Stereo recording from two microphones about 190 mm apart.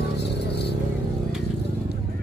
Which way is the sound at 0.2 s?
60° left (ahead or behind).